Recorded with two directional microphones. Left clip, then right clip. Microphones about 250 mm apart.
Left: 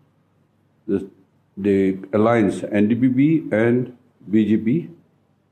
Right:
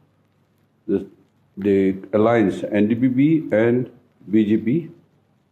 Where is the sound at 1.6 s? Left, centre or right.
Left.